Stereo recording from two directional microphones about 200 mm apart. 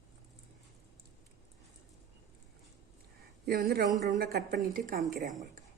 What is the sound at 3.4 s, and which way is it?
A woman's voice, 50° right (ahead or behind).